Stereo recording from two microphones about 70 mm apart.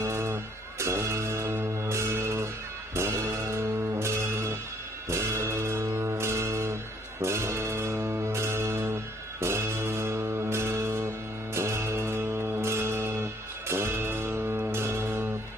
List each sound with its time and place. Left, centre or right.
0.0 s music: right